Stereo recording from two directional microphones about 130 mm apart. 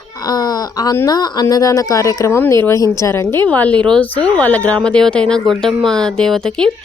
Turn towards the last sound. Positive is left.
turn(degrees=5)  # may be behind; listen again after turning